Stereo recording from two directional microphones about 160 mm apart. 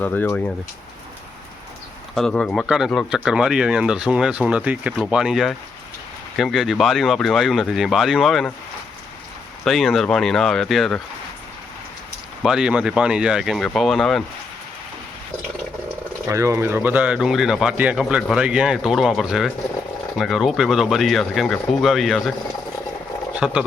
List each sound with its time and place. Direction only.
0.0 s speech: 10° left (ahead or behind)
2.1 s speech: 5° left (ahead or behind)
9.6 s speech: centre (ahead or behind)
12.4 s speech: 5° right (ahead or behind)
16.3 s speech: 20° right (ahead or behind); by 22.3 s centre (ahead or behind)
23.3 s speech: 5° right (ahead or behind)